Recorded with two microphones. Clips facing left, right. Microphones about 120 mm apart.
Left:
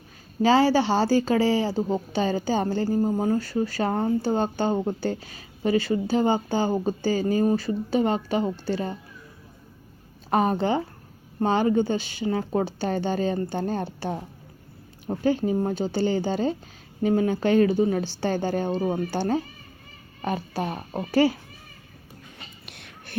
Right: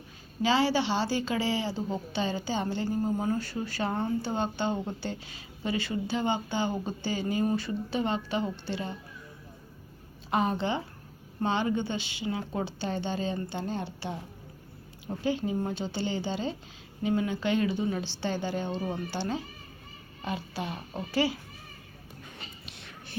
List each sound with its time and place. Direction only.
0.4 s speech: 45° left (ahead or behind)
10.2 s a woman's voice: 45° left (ahead or behind)
22.6 s a sound: 60° left (ahead or behind)